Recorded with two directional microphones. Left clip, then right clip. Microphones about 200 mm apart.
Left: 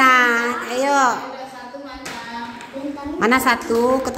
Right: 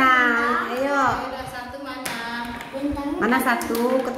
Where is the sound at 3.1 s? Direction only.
40° left (ahead or behind).